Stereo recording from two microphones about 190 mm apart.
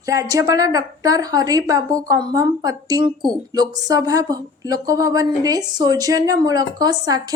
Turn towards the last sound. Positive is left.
turn(degrees=-20)  # may be behind; listen again after turning